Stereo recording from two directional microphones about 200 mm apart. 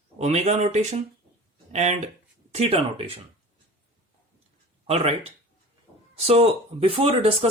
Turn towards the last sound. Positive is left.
turn(degrees=-30)  # may be behind; listen again after turning